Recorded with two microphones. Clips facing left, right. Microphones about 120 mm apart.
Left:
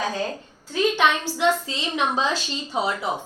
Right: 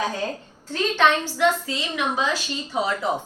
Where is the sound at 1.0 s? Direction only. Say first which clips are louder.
Right 5 dB; 15° left (ahead or behind).